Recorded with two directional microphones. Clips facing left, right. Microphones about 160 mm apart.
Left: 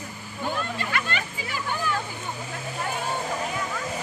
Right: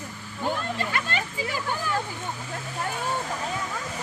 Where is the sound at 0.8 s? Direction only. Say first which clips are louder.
Right 1 dB; 35° right (ahead or behind).